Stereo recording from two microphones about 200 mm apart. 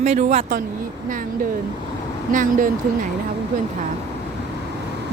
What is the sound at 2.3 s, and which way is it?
Speech, 40° right (ahead or behind).